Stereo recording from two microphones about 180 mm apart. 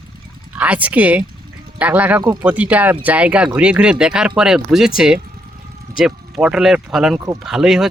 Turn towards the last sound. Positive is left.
turn(degrees=-5)  # may be behind; listen again after turning